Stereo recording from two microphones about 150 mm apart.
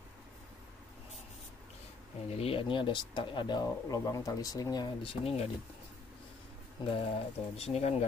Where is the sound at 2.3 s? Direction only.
40° left (ahead or behind).